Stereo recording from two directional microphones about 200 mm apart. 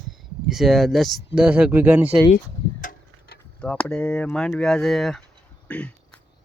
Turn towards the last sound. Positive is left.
turn(degrees=5)  # may be behind; listen again after turning